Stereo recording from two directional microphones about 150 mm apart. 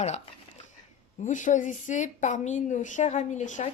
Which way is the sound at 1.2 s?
55° left (ahead or behind).